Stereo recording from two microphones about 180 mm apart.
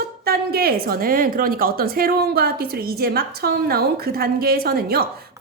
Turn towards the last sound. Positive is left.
turn(degrees=-60)  # may be behind; listen again after turning